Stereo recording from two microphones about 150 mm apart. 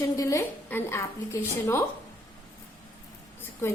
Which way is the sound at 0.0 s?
20° left (ahead or behind).